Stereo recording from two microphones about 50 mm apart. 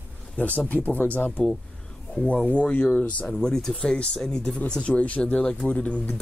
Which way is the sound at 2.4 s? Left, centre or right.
Left.